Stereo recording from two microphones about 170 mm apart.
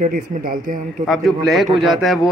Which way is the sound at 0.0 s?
55° right (ahead or behind).